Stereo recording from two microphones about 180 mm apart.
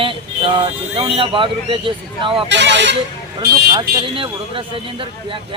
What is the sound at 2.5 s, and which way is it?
Speech, 80° right.